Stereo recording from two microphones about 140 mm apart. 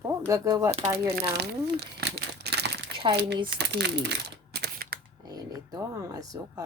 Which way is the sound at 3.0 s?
35° right (ahead or behind).